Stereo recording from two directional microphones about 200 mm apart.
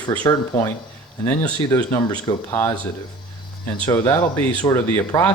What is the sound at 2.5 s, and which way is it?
Speech, 10° left (ahead or behind).